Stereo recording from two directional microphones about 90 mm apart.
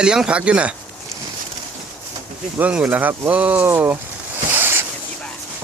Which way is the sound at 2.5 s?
15° right (ahead or behind).